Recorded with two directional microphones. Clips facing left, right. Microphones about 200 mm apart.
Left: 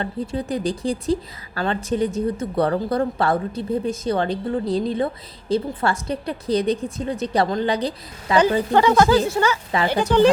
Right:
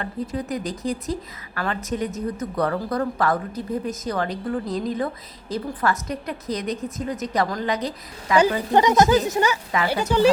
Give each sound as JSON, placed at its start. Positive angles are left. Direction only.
{"t": 0.0, "sound": "a woman's voice", "side_deg": 30}
{"t": 8.7, "sound": "speech", "side_deg": -15}